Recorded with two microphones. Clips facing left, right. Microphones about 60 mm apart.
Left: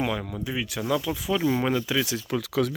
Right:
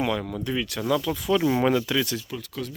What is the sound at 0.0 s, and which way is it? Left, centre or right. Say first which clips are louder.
Speech: right 2 dB; centre.